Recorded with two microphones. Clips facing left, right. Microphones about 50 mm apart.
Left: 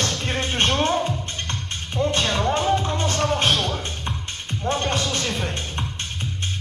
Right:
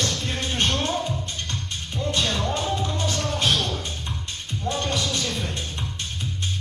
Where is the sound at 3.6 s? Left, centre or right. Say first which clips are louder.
Left 2 dB; left.